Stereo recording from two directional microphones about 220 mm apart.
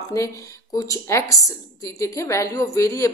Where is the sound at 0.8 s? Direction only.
15° left (ahead or behind).